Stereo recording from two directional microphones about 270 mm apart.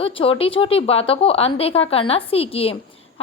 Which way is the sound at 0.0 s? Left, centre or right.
Centre.